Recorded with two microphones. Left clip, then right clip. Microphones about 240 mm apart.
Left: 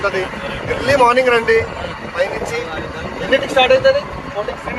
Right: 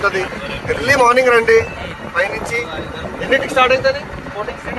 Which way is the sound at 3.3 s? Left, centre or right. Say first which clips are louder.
Left 1 dB; centre.